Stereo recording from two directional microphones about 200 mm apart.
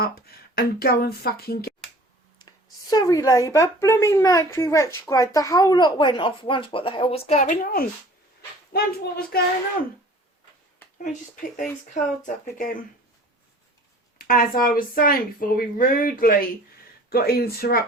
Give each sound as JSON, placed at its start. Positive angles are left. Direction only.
{"t": 0.0, "sound": "speech", "side_deg": 50}
{"t": 2.9, "sound": "a woman's voice", "side_deg": 20}
{"t": 11.0, "sound": "speech", "side_deg": 40}
{"t": 14.2, "sound": "speech", "side_deg": 45}